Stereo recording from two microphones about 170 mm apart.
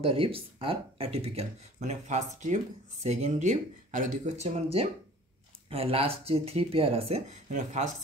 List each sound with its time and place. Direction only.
0.0 s speech: 35° right (ahead or behind)